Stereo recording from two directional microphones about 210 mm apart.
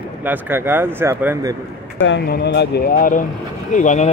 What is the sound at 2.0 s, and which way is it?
Speech, 55° left (ahead or behind).